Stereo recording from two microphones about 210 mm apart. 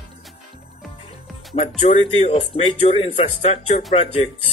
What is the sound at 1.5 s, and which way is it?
Speech, 35° left (ahead or behind).